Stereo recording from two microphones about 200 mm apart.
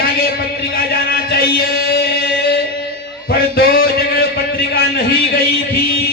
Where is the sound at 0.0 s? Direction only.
50° left (ahead or behind).